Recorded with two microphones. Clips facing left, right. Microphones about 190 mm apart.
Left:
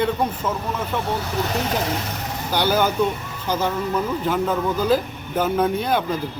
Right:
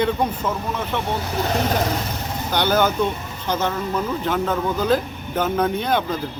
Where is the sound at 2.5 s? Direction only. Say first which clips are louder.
Even; 10° left (ahead or behind).